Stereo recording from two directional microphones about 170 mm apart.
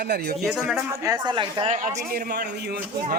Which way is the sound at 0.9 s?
20° right (ahead or behind).